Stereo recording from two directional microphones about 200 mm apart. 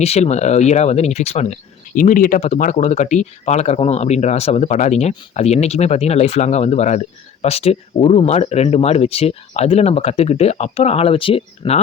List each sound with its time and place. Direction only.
0.0 s speech: 30° left (ahead or behind)